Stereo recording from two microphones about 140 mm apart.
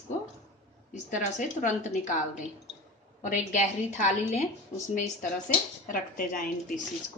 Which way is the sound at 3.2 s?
65° left (ahead or behind).